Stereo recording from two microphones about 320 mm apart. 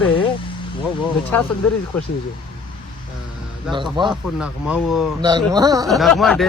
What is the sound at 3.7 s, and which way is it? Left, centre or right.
Speech, centre.